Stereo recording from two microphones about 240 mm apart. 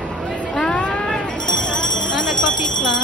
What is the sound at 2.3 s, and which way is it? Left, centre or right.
Bell, left.